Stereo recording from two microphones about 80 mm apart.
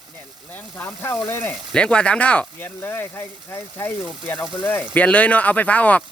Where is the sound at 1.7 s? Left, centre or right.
Centre.